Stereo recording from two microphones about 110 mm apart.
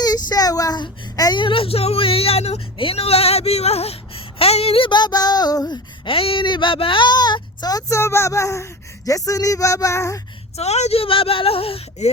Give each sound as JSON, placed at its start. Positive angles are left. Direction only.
{"t": 0.0, "sound": "a child's voice", "side_deg": 35}
{"t": 1.4, "sound": "speech", "side_deg": 50}
{"t": 6.1, "sound": "speech", "side_deg": 55}
{"t": 10.6, "sound": "speech", "side_deg": 75}